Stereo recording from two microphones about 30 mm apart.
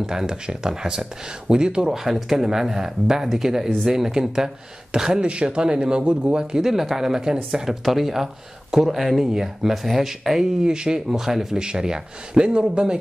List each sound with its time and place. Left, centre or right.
0.0 s speech: centre
1.9 s speech: centre
5.2 s speech: right
5.6 s speech: right
6.6 s speech: centre
7.6 s speech: centre
9.2 s speech: centre
10.6 s speech: right
11.1 s speech: centre
11.5 s speech: right